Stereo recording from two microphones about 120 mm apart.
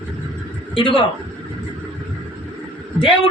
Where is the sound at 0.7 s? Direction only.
45° left (ahead or behind).